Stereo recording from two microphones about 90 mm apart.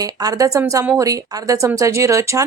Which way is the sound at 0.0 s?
40° right (ahead or behind).